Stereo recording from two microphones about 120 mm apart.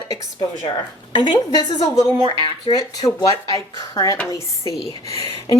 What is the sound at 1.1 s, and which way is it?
Speech, 40° left (ahead or behind).